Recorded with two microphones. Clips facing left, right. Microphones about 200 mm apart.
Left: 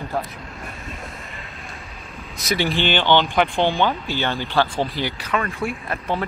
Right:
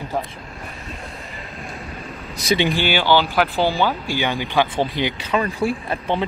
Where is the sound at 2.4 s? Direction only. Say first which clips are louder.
Right 4 dB; 20° right (ahead or behind).